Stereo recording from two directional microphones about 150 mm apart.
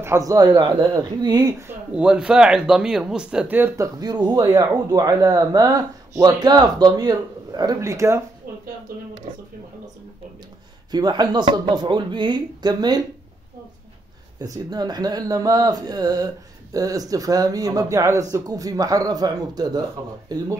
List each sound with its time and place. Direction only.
0.0 s speech: 20° right (ahead or behind)
1.7 s speech: 10° right (ahead or behind)
8.5 s a sound: 80° right
8.9 s speech: 75° right (ahead or behind)
10.9 s speech: 30° right (ahead or behind)
14.4 s speech: 25° right (ahead or behind)